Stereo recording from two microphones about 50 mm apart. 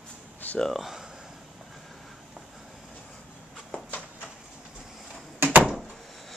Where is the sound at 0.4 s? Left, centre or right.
Left.